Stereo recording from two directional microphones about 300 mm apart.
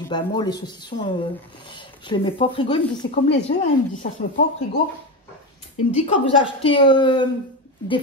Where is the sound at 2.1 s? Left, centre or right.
Centre.